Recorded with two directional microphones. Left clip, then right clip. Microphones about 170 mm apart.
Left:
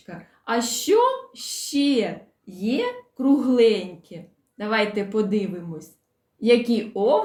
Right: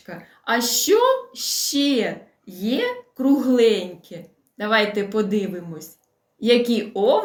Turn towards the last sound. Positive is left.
turn(degrees=10)  # may be behind; listen again after turning